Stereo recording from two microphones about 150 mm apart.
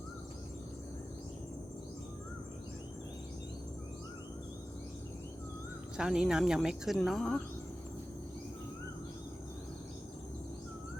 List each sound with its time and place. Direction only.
6.0 s speech: 5° right (ahead or behind)